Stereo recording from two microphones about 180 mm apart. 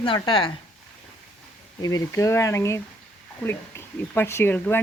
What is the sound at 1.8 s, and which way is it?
Speech, 15° left (ahead or behind).